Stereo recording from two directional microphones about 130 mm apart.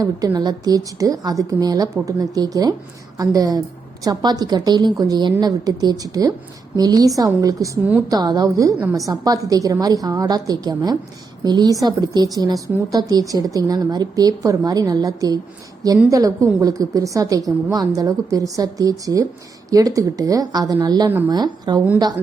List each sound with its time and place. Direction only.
0.3 s a woman's voice: 30° right (ahead or behind)